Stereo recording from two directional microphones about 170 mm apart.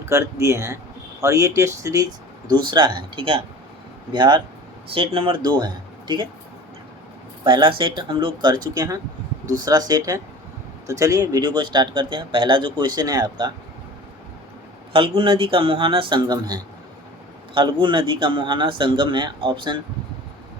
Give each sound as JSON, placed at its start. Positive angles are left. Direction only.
{"t": 0.0, "sound": "speech", "side_deg": -15}
{"t": 7.4, "sound": "speech", "side_deg": -25}
{"t": 14.9, "sound": "speech", "side_deg": -30}